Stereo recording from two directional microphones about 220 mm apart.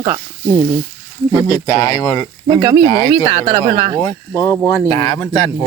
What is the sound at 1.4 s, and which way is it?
Speech, 15° left (ahead or behind).